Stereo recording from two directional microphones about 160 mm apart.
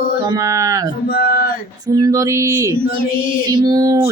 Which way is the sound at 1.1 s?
70° left (ahead or behind).